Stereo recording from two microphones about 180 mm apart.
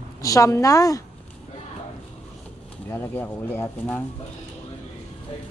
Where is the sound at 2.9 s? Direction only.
15° left (ahead or behind).